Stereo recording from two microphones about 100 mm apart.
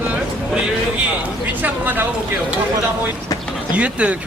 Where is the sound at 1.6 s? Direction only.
20° right (ahead or behind).